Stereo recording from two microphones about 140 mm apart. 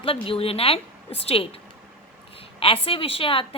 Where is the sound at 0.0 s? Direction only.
40° left (ahead or behind).